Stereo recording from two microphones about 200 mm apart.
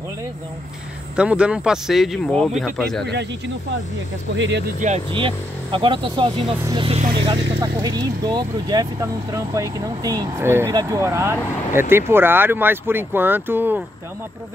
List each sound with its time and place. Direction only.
1.1 s speech: 5° right (ahead or behind)
4.4 s speech: 60° right (ahead or behind)
4.7 s speech: 35° right (ahead or behind)
5.1 s speech: 25° right (ahead or behind); by 13.8 s 10° right (ahead or behind)